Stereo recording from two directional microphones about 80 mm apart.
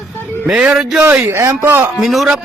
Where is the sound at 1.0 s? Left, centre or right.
Right.